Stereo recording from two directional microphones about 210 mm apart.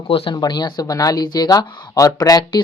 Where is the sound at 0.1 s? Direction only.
25° left (ahead or behind).